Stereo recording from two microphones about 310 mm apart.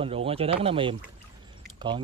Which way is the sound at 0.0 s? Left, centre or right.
Centre.